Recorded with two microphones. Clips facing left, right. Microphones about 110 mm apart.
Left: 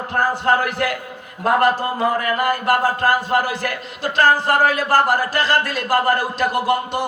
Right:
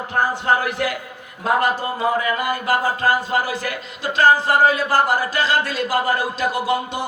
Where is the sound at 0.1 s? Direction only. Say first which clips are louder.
Left 1 dB; 50° left (ahead or behind).